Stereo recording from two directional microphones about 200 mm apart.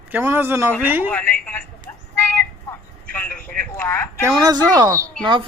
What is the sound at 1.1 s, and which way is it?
Speech, 5° left (ahead or behind).